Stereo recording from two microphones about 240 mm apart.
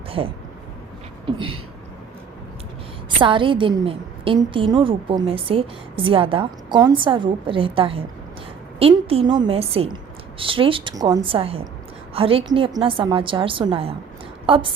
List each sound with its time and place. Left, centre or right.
0.2 s a woman's voice: centre
3.2 s a woman's voice: right